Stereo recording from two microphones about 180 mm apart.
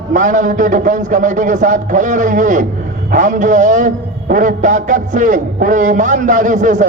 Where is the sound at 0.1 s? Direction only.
45° right (ahead or behind).